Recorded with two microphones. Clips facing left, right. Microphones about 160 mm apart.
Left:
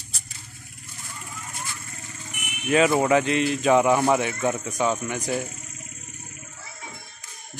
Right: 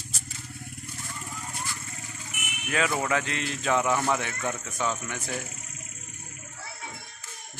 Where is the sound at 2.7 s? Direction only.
25° left (ahead or behind).